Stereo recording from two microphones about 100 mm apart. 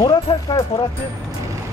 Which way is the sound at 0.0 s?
40° left (ahead or behind).